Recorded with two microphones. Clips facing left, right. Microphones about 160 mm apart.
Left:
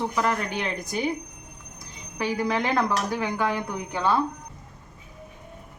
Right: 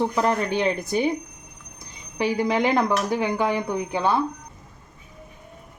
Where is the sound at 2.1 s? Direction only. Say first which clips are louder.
Right 4 dB; 25° right (ahead or behind).